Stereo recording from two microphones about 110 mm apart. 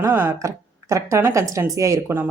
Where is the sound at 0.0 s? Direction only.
20° right (ahead or behind).